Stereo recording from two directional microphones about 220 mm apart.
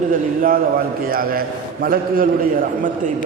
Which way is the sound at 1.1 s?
40° right (ahead or behind).